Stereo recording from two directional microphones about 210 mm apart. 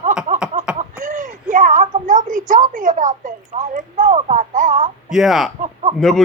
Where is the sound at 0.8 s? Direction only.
40° right (ahead or behind).